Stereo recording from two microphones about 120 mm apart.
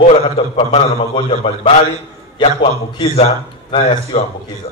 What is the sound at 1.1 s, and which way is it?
Speech, 55° left (ahead or behind).